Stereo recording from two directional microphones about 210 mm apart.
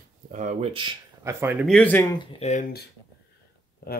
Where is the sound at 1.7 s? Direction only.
5° left (ahead or behind); by 2.7 s 35° left (ahead or behind).